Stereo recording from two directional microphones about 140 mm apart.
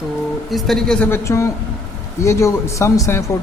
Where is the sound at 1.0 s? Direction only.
20° left (ahead or behind).